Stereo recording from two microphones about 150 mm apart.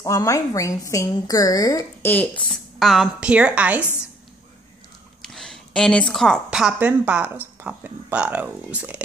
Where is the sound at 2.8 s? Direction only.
Centre (ahead or behind).